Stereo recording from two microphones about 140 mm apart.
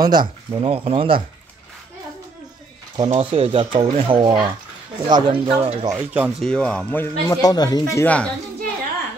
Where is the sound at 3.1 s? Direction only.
45° right (ahead or behind).